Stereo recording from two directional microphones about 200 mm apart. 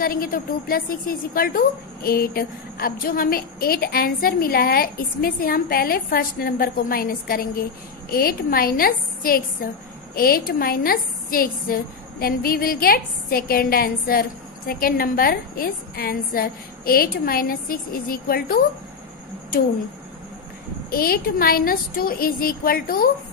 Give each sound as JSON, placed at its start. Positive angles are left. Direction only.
{"t": 0.0, "sound": "a woman's voice", "side_deg": 45}
{"t": 20.9, "sound": "a woman's voice", "side_deg": 45}